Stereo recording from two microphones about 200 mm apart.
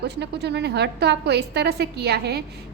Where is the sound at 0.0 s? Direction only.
55° right (ahead or behind).